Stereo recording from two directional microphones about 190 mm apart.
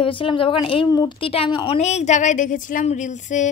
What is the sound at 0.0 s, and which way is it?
A woman's voice, 25° left (ahead or behind).